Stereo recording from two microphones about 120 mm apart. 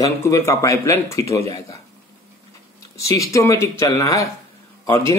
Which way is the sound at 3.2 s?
25° left (ahead or behind).